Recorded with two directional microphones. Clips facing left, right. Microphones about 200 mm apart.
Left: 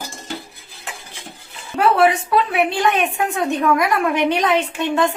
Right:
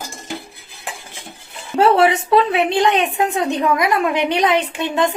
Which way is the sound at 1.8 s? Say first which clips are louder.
Right 2 dB; 25° right (ahead or behind).